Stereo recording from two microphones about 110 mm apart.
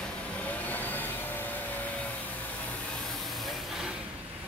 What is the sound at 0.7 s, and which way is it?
Vacuum cleaner, 15° left (ahead or behind).